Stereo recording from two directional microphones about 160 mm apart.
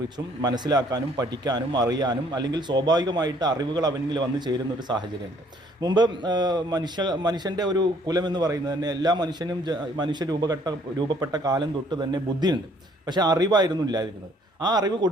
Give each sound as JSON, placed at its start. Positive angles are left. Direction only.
{"t": 0.4, "sound": "a man's voice", "side_deg": -25}